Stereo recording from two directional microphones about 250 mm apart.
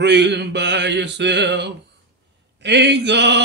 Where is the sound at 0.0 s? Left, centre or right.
Right.